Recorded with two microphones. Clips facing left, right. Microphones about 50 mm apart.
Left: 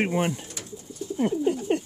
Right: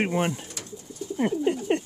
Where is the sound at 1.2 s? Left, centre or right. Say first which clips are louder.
Even; right.